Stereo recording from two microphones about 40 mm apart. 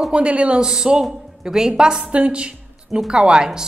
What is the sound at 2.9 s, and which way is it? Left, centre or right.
Speech, centre.